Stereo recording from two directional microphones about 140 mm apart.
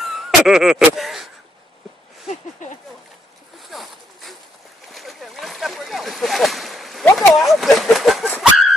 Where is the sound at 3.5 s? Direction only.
Centre (ahead or behind).